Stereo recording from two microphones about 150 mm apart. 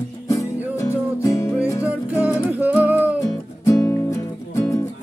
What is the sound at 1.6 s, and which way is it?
Music, 10° right (ahead or behind).